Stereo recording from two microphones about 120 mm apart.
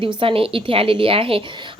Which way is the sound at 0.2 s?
50° right (ahead or behind).